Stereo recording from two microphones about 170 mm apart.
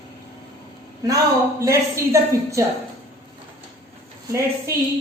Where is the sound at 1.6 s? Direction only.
15° right (ahead or behind).